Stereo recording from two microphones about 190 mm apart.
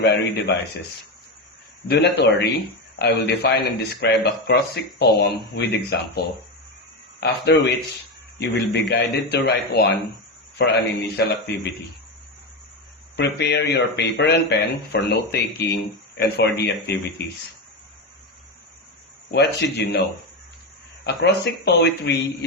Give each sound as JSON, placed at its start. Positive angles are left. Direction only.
{"t": 1.9, "sound": "speech", "side_deg": 65}
{"t": 13.1, "sound": "speech", "side_deg": 60}
{"t": 19.3, "sound": "speech", "side_deg": 65}